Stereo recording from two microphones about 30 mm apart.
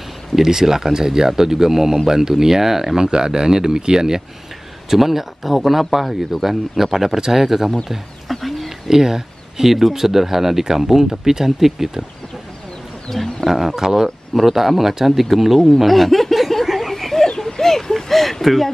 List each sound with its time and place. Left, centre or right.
0.4 s speech: centre
4.8 s speech: centre
8.3 s bird: centre
8.8 s a sound: centre
9.7 s speech: centre
13.1 s wild animals: centre
13.5 s speech: centre
15.8 s snicker: centre
16.9 s a sound: centre